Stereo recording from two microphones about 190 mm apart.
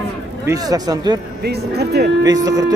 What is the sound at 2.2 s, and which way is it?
Speech, 20° right (ahead or behind).